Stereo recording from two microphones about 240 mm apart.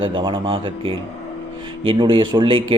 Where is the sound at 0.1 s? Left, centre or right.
Centre.